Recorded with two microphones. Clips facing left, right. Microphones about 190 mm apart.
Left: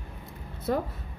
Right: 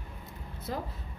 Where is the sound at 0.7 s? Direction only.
55° left (ahead or behind).